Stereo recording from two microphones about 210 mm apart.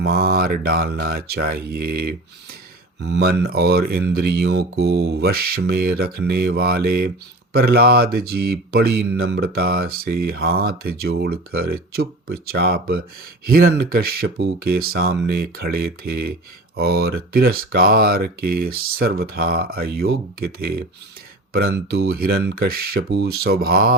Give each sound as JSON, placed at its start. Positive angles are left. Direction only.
{"t": 0.0, "sound": "speech", "side_deg": -50}